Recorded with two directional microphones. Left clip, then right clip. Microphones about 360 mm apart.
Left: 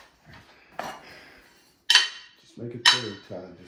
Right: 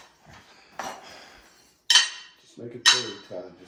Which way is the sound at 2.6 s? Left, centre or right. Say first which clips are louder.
Left 2 dB; left.